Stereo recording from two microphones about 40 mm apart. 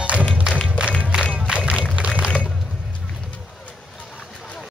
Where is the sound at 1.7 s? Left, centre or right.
Right.